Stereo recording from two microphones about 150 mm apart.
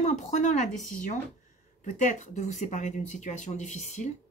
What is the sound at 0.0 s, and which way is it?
A woman's voice, 50° left (ahead or behind).